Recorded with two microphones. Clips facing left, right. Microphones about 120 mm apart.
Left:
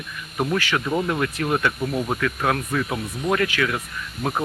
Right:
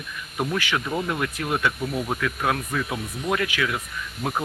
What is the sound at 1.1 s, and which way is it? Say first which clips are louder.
Speech: left 3 dB; 5° right (ahead or behind).